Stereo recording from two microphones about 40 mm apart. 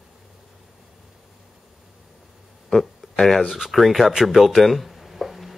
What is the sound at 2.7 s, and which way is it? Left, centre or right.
Speech, centre.